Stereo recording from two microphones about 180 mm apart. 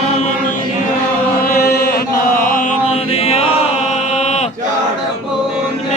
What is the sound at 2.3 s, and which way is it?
Chant, 50° left (ahead or behind).